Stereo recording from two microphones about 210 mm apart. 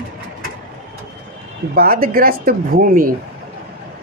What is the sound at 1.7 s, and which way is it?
Speech, 45° right (ahead or behind).